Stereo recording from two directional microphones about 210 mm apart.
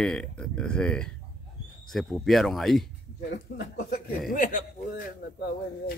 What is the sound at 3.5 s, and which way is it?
Speech, 55° left (ahead or behind).